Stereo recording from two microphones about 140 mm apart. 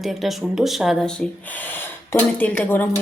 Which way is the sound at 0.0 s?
Centre (ahead or behind).